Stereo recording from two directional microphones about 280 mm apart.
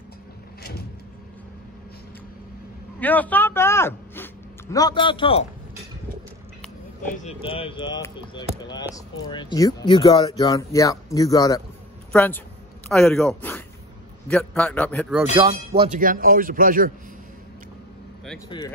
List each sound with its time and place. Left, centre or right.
3.0 s speech: centre
7.2 s a man's voice: centre
15.8 s a man's voice: right